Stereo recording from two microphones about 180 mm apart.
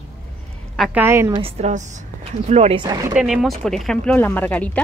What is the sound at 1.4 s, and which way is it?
A woman's voice, 35° right (ahead or behind).